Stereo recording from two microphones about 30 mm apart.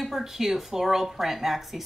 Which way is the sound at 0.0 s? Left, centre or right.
Centre.